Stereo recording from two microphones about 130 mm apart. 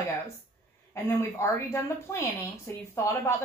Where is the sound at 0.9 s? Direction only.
20° left (ahead or behind).